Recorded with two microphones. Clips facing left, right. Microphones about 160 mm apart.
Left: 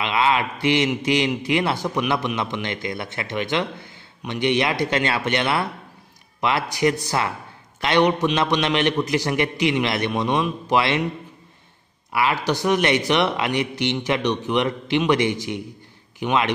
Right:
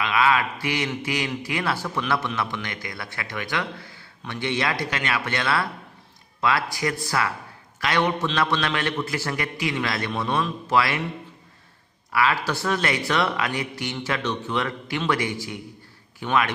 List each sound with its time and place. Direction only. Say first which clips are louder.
0.0 s a man's voice: left 1 dB; 25° left (ahead or behind)
12.1 s a man's voice: left 2 dB; 20° left (ahead or behind)